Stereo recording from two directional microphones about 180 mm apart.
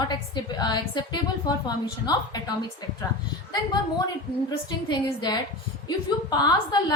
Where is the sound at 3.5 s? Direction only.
25° left (ahead or behind).